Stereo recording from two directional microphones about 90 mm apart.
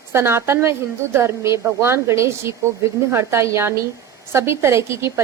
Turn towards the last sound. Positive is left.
turn(degrees=-30)  # may be behind; listen again after turning